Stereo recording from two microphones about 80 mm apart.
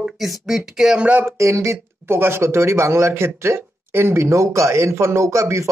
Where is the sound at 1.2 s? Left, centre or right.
Right.